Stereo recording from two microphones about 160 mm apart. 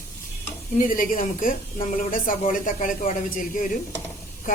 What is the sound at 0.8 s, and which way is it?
A woman's voice, 55° left (ahead or behind).